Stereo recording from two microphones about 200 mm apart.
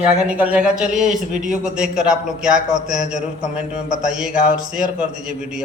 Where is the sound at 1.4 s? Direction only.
40° right (ahead or behind).